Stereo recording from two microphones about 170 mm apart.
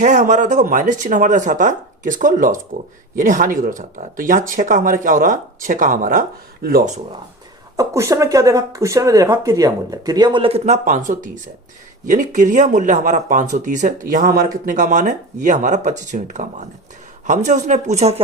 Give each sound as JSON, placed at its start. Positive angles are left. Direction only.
{"t": 0.0, "sound": "speech", "side_deg": -45}
{"t": 7.8, "sound": "speech", "side_deg": -20}